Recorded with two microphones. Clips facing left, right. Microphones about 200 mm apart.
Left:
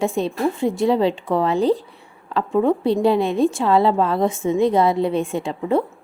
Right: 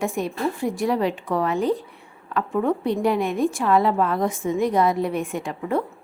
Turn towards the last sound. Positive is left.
turn(degrees=25)  # may be behind; listen again after turning